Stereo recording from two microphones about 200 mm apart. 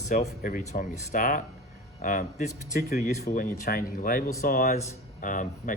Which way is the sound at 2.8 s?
50° left (ahead or behind).